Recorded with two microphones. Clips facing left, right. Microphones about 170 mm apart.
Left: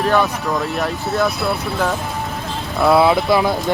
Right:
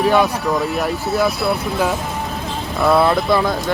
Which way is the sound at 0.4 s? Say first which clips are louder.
Right 2 dB; centre (ahead or behind).